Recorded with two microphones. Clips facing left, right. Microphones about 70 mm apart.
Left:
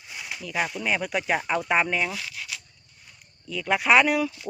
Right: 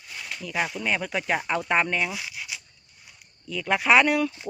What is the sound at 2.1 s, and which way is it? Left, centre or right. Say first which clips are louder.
Zipper: even; centre.